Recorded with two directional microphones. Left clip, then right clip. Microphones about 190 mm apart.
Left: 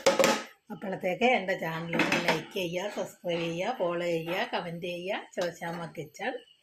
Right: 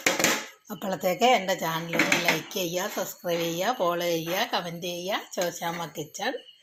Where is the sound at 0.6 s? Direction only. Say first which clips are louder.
Right 5 dB; 15° right (ahead or behind).